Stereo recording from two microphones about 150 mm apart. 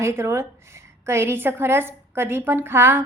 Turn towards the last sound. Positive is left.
turn(degrees=-15)  # may be behind; listen again after turning